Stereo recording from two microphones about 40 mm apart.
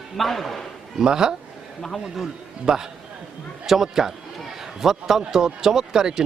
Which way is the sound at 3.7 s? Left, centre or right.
Centre.